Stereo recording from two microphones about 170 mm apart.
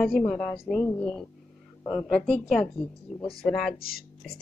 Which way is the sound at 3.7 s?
60° left (ahead or behind).